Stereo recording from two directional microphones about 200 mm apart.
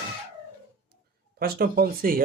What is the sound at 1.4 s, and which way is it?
Speech, 50° right (ahead or behind).